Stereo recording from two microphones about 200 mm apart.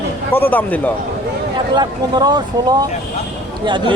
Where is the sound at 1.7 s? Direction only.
20° right (ahead or behind).